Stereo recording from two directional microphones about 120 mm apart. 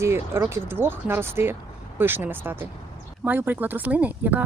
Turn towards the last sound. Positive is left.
turn(degrees=-15)  # may be behind; listen again after turning